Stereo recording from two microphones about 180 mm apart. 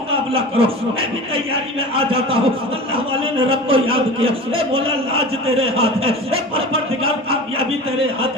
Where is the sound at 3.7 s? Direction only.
30° right (ahead or behind).